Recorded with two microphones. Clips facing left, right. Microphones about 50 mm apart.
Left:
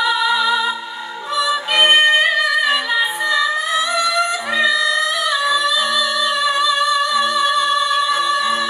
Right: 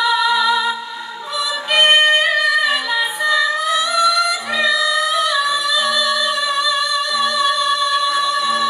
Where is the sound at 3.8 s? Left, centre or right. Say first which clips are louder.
Right 2 dB; centre.